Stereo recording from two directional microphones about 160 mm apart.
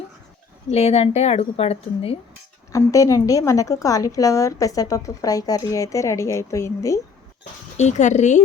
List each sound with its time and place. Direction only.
0.7 s a woman's voice: 40° left (ahead or behind)
2.7 s a woman's voice: 20° left (ahead or behind)
7.8 s speech: 45° left (ahead or behind)